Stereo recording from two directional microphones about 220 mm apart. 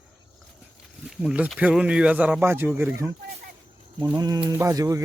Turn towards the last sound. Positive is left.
turn(degrees=-15)  # may be behind; listen again after turning